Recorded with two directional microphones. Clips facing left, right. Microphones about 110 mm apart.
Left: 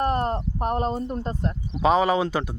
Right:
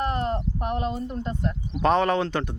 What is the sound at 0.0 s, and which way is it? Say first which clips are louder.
Speech: left 2 dB; 40° left (ahead or behind).